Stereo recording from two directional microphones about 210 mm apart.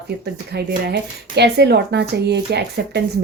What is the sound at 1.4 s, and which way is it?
A woman's voice, 50° right (ahead or behind).